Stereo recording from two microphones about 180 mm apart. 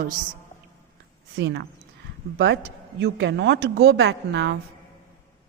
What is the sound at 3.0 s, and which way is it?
A woman's voice, 75° right (ahead or behind).